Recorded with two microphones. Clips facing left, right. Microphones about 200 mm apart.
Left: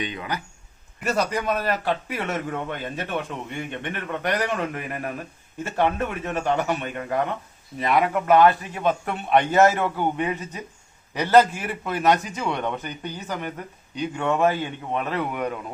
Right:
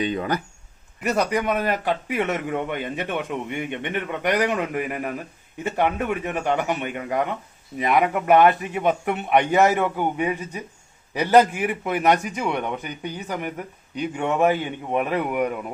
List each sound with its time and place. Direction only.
0.0 s speech: 40° right (ahead or behind)
1.0 s a man's voice: 15° right (ahead or behind)